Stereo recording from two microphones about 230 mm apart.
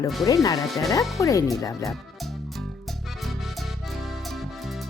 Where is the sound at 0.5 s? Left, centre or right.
Centre.